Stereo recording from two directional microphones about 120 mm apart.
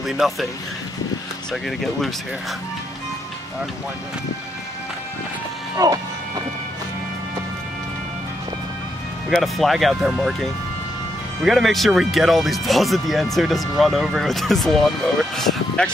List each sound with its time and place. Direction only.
0.0 s speech: centre (ahead or behind)
1.5 s speech: centre (ahead or behind)
5.8 s music: 30° right (ahead or behind)
9.3 s speech: centre (ahead or behind)